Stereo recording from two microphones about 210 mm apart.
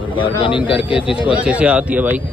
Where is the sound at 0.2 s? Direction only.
25° left (ahead or behind).